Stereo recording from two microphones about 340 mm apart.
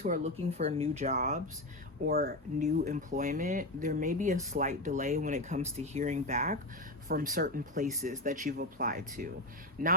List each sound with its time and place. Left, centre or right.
0.0 s speech: centre